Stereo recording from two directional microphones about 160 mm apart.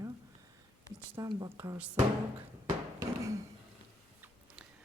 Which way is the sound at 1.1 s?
25° right (ahead or behind).